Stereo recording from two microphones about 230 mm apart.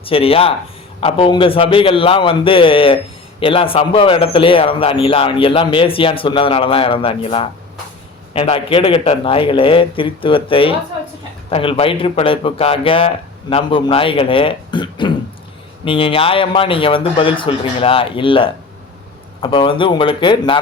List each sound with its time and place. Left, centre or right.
0.0 s a man's voice: left